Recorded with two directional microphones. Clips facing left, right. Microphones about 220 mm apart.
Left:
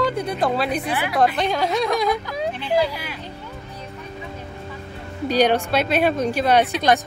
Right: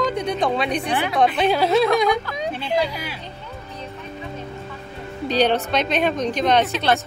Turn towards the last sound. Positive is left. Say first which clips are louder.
# left 1 dB
turn(degrees=15)  # may be behind; listen again after turning